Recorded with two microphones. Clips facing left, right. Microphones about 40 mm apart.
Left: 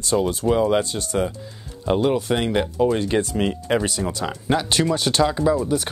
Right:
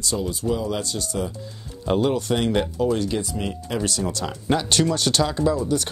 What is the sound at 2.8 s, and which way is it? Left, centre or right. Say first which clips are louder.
Speech: left 5 dB; left.